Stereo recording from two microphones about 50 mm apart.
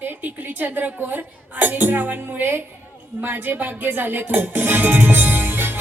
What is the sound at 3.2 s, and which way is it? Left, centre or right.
Music, right.